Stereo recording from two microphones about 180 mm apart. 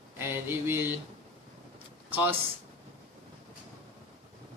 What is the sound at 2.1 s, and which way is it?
Speech, 10° right (ahead or behind).